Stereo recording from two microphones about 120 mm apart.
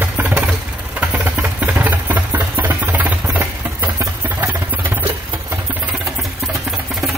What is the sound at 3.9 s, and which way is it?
Vehicle, 25° right (ahead or behind).